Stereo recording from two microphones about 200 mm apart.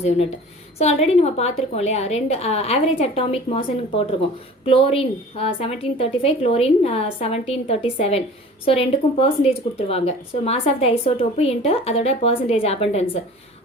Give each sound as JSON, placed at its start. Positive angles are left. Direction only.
{"t": 0.8, "sound": "a woman's voice", "side_deg": 30}